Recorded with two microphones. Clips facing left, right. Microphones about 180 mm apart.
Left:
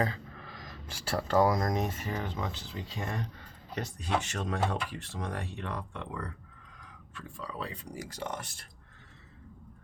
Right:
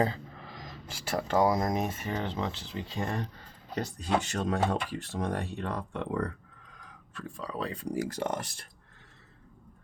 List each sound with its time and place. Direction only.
0.6 s speech: 20° right (ahead or behind); by 4.9 s 35° right (ahead or behind)
5.1 s speech: 50° right (ahead or behind)